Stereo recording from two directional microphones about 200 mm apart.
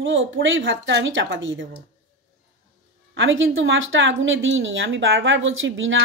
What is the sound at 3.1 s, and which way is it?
Speech, 70° right (ahead or behind).